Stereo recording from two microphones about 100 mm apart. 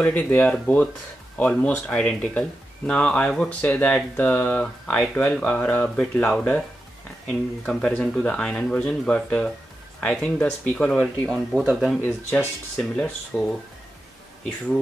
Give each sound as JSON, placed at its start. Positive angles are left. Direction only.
{"t": 0.0, "sound": "speech", "side_deg": 15}
{"t": 12.0, "sound": "speech", "side_deg": 20}
{"t": 12.7, "sound": "speech", "side_deg": 10}